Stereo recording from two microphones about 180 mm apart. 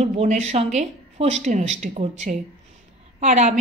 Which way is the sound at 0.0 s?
40° right (ahead or behind).